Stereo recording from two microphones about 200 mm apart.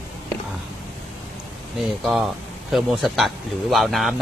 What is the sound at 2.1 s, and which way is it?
Speech, centre (ahead or behind).